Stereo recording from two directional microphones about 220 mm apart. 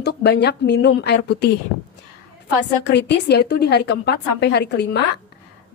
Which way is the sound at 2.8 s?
50° left (ahead or behind).